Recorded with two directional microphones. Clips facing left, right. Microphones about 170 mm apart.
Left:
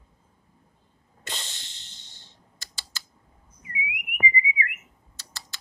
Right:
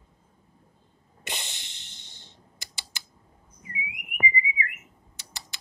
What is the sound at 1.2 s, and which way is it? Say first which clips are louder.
Typing: right 1 dB; 15° right (ahead or behind).